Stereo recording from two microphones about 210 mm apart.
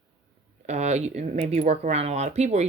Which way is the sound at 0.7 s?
35° right (ahead or behind).